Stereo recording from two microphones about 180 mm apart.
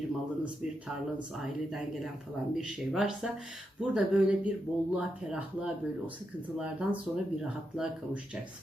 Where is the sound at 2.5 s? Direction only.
5° right (ahead or behind).